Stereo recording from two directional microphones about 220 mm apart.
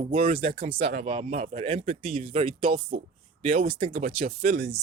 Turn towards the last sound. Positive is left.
turn(degrees=-30)  # may be behind; listen again after turning